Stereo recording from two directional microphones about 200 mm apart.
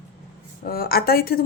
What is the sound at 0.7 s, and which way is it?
Speech, 50° left (ahead or behind).